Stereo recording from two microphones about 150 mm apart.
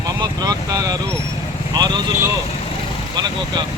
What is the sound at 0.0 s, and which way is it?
Vehicle, 25° right (ahead or behind).